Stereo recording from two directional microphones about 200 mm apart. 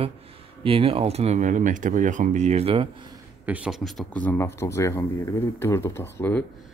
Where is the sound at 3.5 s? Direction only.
5° right (ahead or behind); by 6.4 s 10° left (ahead or behind).